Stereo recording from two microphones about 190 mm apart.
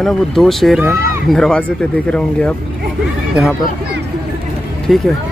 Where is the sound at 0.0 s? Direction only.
Centre (ahead or behind).